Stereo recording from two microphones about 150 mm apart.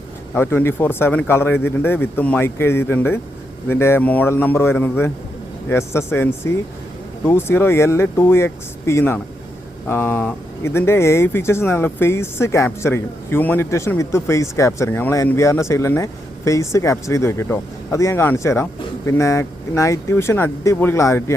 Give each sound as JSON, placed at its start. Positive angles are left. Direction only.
{"t": 0.3, "sound": "speech", "side_deg": 15}